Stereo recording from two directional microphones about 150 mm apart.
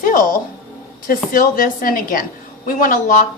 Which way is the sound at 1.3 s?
70° left (ahead or behind).